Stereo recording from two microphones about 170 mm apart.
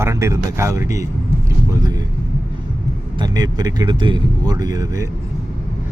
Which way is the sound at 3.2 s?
25° right (ahead or behind).